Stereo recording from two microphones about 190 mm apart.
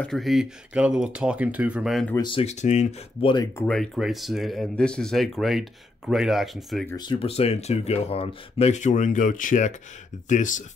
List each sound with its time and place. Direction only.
0.0 s speech: centre (ahead or behind)
2.1 s speech: 25° left (ahead or behind)
3.5 s speech: 5° left (ahead or behind)
6.9 s speech: 25° left (ahead or behind); by 10.6 s 40° left (ahead or behind)